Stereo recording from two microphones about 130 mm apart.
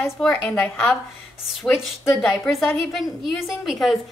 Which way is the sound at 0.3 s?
15° left (ahead or behind).